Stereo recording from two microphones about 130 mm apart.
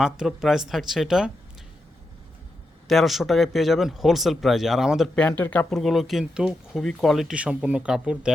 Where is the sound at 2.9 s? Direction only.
Centre (ahead or behind).